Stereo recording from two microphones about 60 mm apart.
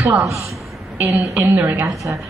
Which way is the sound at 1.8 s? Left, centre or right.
Right.